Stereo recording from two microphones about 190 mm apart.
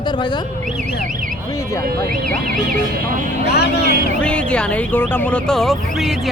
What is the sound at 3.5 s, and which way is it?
Speech, 60° left (ahead or behind).